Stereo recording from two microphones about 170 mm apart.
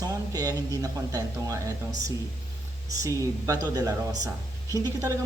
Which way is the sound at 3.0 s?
20° right (ahead or behind).